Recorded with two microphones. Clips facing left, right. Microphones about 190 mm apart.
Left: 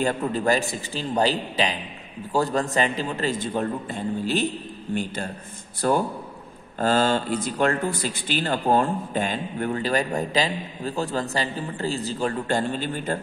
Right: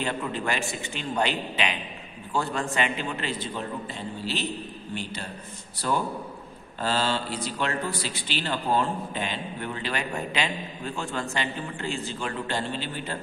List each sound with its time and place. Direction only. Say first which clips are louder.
0.0 s a man's voice: left 6 dB; 40° left (ahead or behind)